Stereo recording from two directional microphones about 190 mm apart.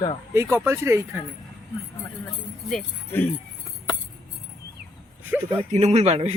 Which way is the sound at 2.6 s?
5° left (ahead or behind).